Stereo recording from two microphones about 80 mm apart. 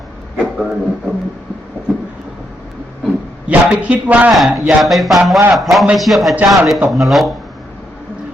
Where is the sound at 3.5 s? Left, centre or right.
Centre.